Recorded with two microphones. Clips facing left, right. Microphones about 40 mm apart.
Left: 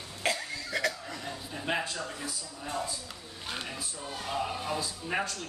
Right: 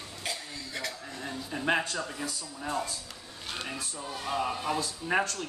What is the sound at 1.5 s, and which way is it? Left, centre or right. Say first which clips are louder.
Speech: right 4 dB; centre.